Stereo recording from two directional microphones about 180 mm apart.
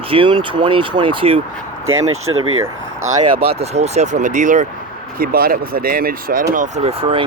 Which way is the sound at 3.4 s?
35° right (ahead or behind).